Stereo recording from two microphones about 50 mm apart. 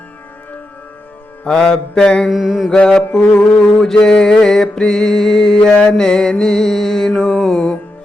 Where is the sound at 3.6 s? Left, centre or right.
Centre.